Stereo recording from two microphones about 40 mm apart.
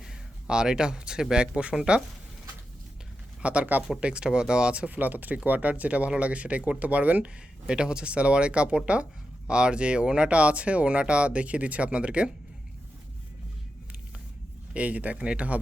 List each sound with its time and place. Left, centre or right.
0.0 s speech: centre
3.4 s speech: right
4.9 s speech: right
7.7 s speech: right
14.7 s speech: right